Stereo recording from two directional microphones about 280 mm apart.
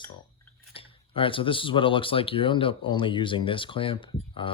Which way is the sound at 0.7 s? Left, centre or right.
Centre.